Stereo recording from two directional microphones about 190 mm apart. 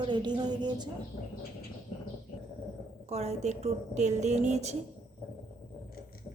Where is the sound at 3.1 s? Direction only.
35° right (ahead or behind).